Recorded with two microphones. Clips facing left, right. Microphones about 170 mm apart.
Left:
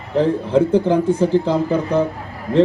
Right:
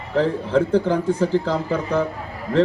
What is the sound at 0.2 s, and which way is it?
Speech, 20° left (ahead or behind).